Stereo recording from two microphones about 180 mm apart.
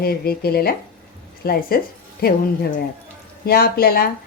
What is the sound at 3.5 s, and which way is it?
Speech, 55° left (ahead or behind).